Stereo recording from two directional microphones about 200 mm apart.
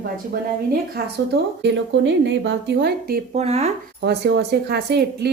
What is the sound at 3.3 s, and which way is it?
Speech, 30° right (ahead or behind).